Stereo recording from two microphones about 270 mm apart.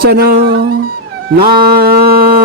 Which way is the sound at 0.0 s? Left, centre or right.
Right.